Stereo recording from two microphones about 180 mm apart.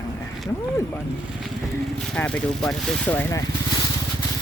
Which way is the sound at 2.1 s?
5° left (ahead or behind).